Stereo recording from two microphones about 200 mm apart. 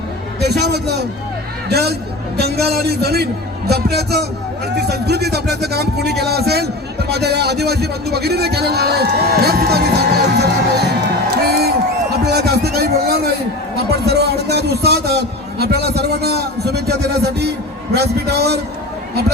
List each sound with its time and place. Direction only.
0.3 s a man's voice: 55° right (ahead or behind)
11.4 s crowd: 50° right (ahead or behind)
12.2 s a man's voice: 55° right (ahead or behind)